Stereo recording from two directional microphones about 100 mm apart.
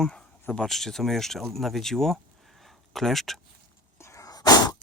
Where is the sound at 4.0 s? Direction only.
30° left (ahead or behind).